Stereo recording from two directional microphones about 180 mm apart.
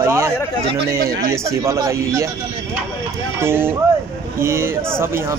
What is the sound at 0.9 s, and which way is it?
Speech, 55° right (ahead or behind).